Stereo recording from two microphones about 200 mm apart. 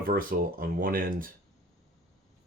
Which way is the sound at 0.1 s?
45° right (ahead or behind).